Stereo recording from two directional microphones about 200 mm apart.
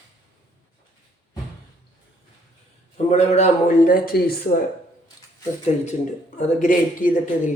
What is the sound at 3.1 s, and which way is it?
Speech, 35° left (ahead or behind).